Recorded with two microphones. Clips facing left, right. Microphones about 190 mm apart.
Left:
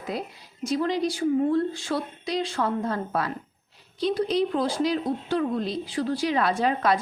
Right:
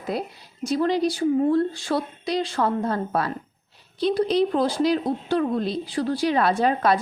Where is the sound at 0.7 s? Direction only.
35° right (ahead or behind).